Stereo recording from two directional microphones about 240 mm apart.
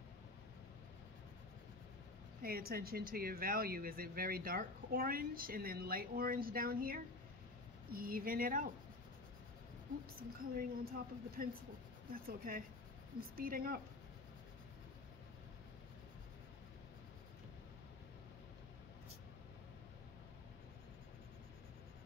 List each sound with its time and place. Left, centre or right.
2.4 s speech: right
10.5 s speech: right